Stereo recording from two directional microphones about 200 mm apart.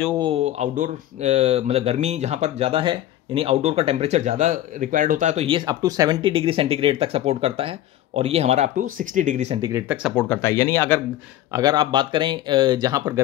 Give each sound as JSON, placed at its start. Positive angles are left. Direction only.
{"t": 0.2, "sound": "speech", "side_deg": -30}
{"t": 5.7, "sound": "speech", "side_deg": -20}
{"t": 9.7, "sound": "speech", "side_deg": -15}
{"t": 10.0, "sound": "speech", "side_deg": 5}
{"t": 11.5, "sound": "speech", "side_deg": -20}